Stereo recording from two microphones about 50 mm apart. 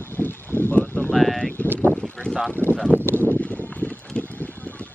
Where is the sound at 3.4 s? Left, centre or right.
Left.